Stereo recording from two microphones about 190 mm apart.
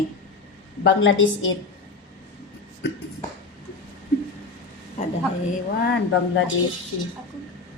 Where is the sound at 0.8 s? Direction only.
80° left.